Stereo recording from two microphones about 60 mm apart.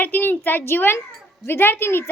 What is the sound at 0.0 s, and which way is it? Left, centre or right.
A child's voice, left.